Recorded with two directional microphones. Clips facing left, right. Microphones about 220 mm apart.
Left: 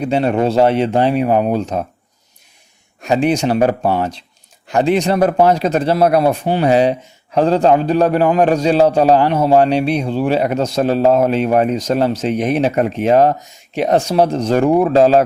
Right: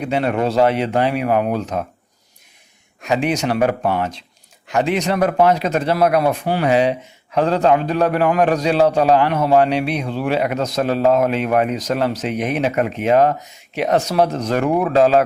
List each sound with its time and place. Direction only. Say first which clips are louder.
0.1 s speech: left 3 dB; 30° left (ahead or behind)
3.0 s a man's voice: left 4 dB; 35° left (ahead or behind)